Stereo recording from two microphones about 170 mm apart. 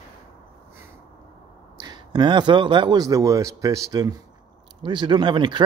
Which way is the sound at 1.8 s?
25° right (ahead or behind).